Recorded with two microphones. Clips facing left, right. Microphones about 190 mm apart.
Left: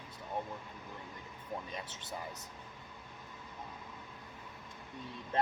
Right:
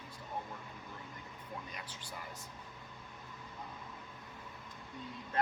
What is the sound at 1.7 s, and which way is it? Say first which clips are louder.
Speech: left 4 dB; 25° left (ahead or behind).